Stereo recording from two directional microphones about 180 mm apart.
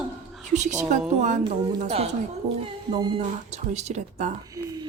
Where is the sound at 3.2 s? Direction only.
40° right (ahead or behind).